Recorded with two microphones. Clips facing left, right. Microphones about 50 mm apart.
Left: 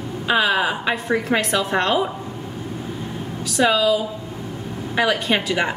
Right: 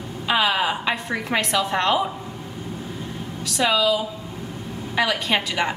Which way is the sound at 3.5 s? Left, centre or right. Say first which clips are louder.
Left 3 dB; centre.